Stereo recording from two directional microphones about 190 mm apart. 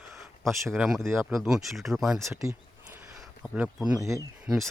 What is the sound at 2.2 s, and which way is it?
Speech, 15° right (ahead or behind).